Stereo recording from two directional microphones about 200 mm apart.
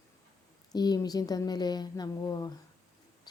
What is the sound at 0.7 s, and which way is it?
A woman's voice, 20° left (ahead or behind).